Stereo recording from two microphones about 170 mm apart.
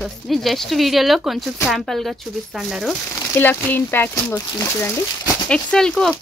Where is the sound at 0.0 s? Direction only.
Centre (ahead or behind).